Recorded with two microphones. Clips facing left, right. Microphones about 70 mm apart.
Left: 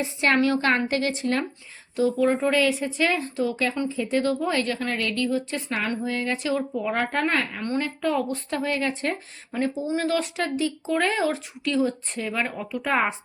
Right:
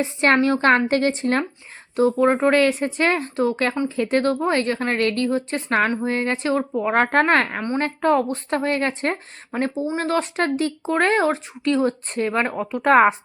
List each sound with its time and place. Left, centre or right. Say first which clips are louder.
0.0 s a woman's voice: right 4 dB; right
3.8 s speech: right 5 dB; right
4.4 s a woman's voice: right 4 dB; right
9.8 s speech: right 2 dB; right
12.8 s speech: right 10 dB; right